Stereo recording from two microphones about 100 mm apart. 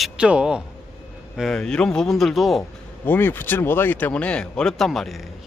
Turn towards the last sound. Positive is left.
turn(degrees=0)  # may be behind; listen again after turning